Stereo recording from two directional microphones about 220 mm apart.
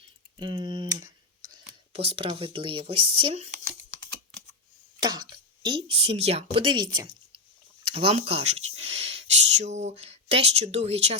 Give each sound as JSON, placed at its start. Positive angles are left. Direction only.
{"t": 0.3, "sound": "tick", "side_deg": -20}
{"t": 1.9, "sound": "speech", "side_deg": -25}
{"t": 4.9, "sound": "speech", "side_deg": -20}
{"t": 8.9, "sound": "a sound", "side_deg": -25}